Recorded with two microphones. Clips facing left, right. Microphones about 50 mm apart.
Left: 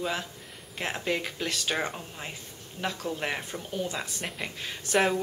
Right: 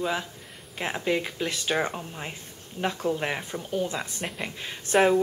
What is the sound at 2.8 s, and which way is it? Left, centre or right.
Speech, right.